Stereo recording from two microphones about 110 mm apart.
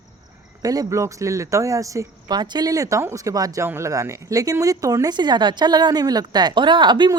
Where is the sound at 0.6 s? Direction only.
35° right (ahead or behind).